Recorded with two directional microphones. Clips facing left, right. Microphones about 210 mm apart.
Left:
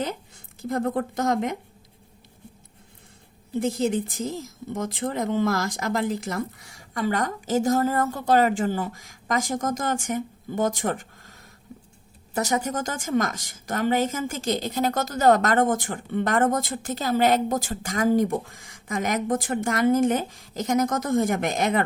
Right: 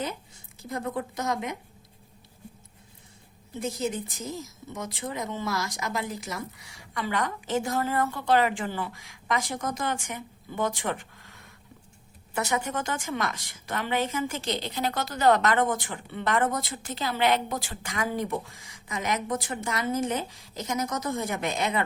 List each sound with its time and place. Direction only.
0.6 s a woman's voice: 55° left (ahead or behind)
3.6 s a woman's voice: 55° left (ahead or behind)